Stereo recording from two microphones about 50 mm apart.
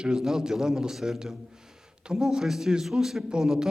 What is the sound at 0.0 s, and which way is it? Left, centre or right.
A man's voice, centre.